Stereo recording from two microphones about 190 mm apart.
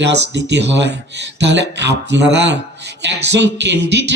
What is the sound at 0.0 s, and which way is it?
Speech, 65° right (ahead or behind).